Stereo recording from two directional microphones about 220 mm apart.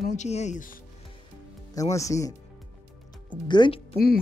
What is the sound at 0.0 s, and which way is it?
Speech, 30° left (ahead or behind).